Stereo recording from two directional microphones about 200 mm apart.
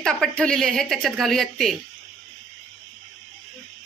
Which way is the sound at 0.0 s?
5° left (ahead or behind).